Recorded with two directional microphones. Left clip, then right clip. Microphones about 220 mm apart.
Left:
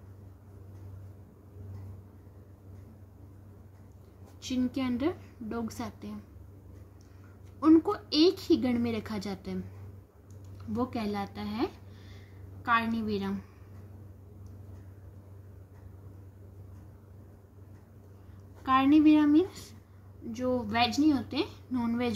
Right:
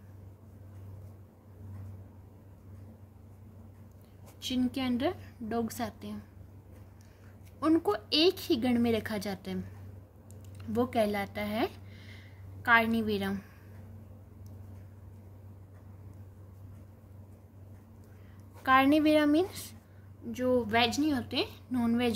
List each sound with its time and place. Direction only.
4.4 s speech: 35° right (ahead or behind)
7.6 s speech: 35° right (ahead or behind)
10.7 s a woman's voice: 45° right (ahead or behind)
12.6 s a woman's voice: 45° right (ahead or behind)
18.6 s a woman's voice: 45° right (ahead or behind)